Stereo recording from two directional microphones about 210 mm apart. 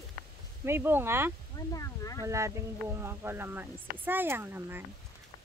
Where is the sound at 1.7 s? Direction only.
15° left (ahead or behind).